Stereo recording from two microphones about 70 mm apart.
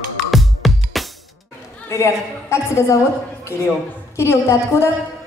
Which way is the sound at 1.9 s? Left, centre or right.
Left.